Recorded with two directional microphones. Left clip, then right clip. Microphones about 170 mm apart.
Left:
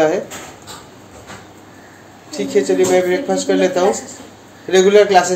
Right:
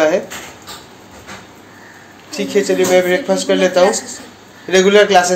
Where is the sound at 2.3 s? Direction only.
10° right (ahead or behind).